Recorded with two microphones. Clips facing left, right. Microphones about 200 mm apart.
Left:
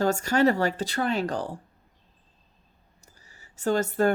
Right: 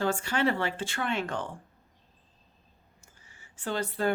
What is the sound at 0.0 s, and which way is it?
Speech, 40° left (ahead or behind).